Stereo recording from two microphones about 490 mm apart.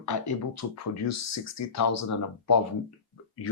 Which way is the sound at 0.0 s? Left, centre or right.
Left.